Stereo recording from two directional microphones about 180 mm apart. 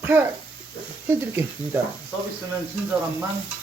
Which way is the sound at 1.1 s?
15° right (ahead or behind).